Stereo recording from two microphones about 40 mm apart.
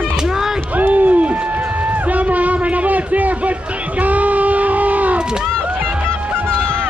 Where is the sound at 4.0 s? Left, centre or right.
Right.